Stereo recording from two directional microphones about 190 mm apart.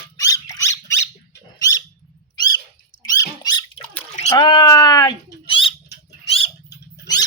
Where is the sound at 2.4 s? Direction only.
20° left (ahead or behind).